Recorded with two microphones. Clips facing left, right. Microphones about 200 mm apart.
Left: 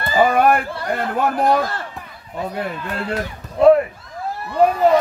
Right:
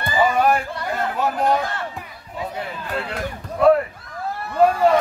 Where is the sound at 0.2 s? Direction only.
55° left (ahead or behind).